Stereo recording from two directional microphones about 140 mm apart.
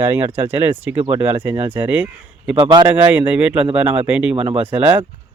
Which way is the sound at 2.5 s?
35° right (ahead or behind).